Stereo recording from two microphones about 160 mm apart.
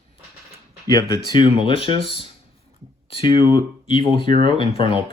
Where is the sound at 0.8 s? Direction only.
20° left (ahead or behind).